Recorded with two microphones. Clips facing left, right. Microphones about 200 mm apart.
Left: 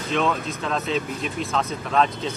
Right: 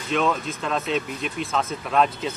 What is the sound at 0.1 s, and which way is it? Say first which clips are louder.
Speech: right 1 dB; centre (ahead or behind).